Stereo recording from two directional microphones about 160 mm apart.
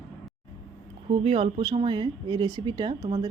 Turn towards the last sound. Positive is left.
turn(degrees=-35)  # may be behind; listen again after turning